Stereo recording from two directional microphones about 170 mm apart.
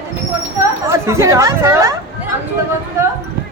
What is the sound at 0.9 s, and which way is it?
A woman's voice, 15° right (ahead or behind).